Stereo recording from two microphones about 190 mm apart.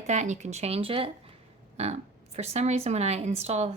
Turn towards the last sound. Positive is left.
turn(degrees=-35)  # may be behind; listen again after turning